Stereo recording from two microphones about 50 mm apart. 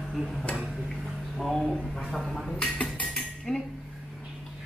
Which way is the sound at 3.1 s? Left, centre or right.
Centre.